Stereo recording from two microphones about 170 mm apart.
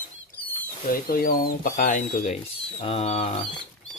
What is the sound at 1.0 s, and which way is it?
Speech, 60° left (ahead or behind).